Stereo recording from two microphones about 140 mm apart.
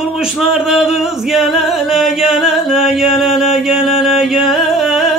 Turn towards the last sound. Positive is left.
turn(degrees=0)  # may be behind; listen again after turning